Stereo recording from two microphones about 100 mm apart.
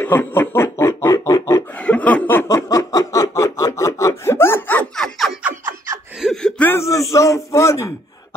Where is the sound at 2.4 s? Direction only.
35° left (ahead or behind); by 4.8 s 20° left (ahead or behind).